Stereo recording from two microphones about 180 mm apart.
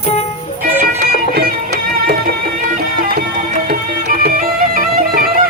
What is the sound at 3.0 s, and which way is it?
Music, 50° right (ahead or behind).